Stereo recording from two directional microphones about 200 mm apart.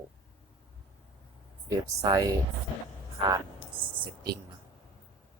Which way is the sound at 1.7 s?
20° right (ahead or behind).